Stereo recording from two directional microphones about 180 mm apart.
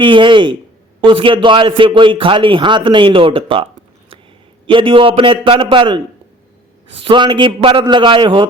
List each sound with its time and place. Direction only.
0.0 s a man's voice: 25° right (ahead or behind)
7.0 s a man's voice: 25° right (ahead or behind)